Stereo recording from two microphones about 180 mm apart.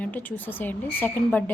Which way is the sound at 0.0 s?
10° left (ahead or behind).